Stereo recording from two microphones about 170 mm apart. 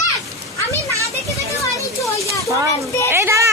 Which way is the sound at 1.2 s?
20° left (ahead or behind).